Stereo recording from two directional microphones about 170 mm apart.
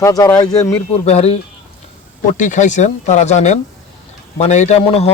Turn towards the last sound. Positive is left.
turn(degrees=35)  # may be behind; listen again after turning